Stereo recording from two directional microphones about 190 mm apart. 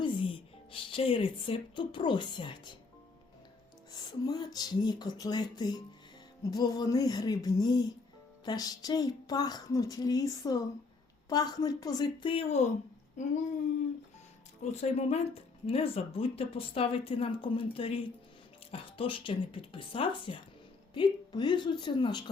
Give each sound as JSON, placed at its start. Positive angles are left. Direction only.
{"t": 0.0, "sound": "speech", "side_deg": 30}
{"t": 4.3, "sound": "speech", "side_deg": 20}
{"t": 14.6, "sound": "speech", "side_deg": 35}